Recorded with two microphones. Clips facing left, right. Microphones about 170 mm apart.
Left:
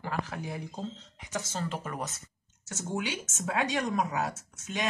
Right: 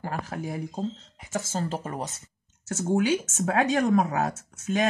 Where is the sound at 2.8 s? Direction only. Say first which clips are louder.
Right 10 dB; 50° right (ahead or behind).